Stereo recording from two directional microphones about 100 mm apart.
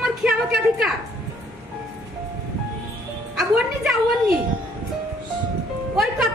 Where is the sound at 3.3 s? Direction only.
5° right (ahead or behind).